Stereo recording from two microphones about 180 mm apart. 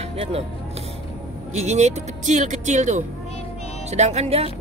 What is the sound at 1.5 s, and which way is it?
Speech, 40° right (ahead or behind).